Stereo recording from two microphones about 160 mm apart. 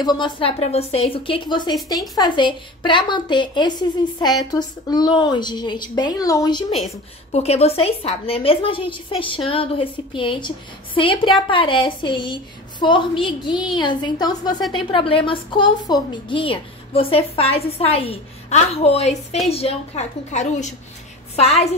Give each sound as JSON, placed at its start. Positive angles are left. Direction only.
{"t": 0.0, "sound": "a woman's voice", "side_deg": 30}
{"t": 6.7, "sound": "a woman's voice", "side_deg": 0}
{"t": 7.3, "sound": "a woman's voice", "side_deg": 40}